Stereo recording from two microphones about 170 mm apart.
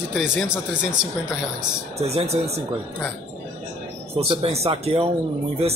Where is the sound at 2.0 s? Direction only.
40° right (ahead or behind).